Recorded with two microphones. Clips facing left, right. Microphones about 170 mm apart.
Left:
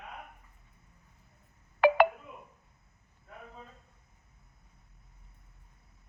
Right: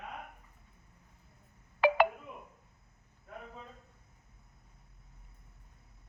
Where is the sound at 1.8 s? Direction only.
55° left (ahead or behind).